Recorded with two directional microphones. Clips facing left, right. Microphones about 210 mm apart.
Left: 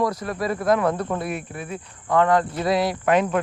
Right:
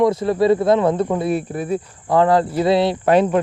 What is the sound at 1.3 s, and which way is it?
Speech, 35° right (ahead or behind).